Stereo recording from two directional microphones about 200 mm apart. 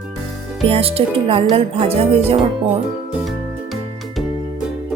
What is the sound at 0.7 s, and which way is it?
Speech, 30° right (ahead or behind).